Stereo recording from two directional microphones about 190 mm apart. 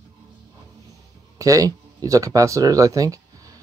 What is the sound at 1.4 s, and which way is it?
Speech, 15° right (ahead or behind).